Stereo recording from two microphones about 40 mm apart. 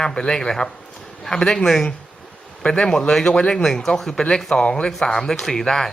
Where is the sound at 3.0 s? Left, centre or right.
Centre.